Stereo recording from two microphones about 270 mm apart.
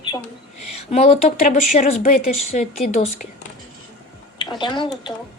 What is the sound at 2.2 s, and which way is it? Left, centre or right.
Speech, left.